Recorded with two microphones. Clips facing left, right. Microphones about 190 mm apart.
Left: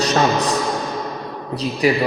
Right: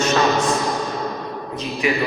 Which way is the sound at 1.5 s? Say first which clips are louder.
Left 5 dB; 35° left (ahead or behind).